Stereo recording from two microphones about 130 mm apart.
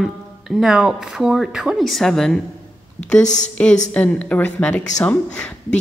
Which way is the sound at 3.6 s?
10° left (ahead or behind).